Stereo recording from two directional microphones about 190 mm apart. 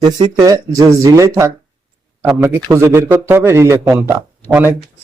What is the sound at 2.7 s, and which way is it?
Speech, 15° right (ahead or behind).